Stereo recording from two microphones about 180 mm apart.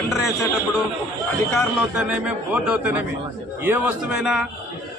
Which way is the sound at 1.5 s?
5° right (ahead or behind).